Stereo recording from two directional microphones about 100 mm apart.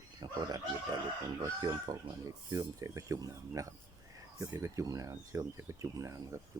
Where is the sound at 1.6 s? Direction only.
35° right (ahead or behind).